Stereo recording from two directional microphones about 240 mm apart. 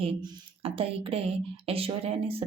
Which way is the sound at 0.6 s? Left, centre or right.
Right.